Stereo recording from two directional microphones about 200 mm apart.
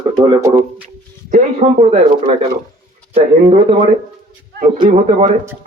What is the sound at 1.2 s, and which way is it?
Speech, 35° right (ahead or behind).